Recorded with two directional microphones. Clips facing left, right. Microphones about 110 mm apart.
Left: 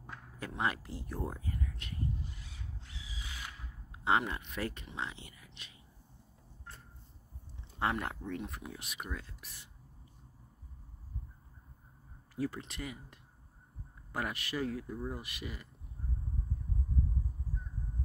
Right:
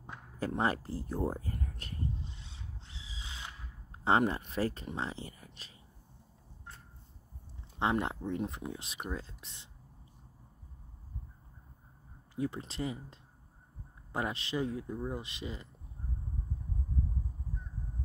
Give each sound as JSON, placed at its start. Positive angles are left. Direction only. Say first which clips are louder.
{"t": 0.6, "sound": "speech", "louder": "right 2 dB", "side_deg": -35}
{"t": 2.1, "sound": "a sound", "louder": "even", "side_deg": -25}
{"t": 3.9, "sound": "speech", "louder": "right 3 dB", "side_deg": -35}
{"t": 7.8, "sound": "speech", "louder": "right 3 dB", "side_deg": -25}
{"t": 12.5, "sound": "speech", "louder": "right 5 dB", "side_deg": -30}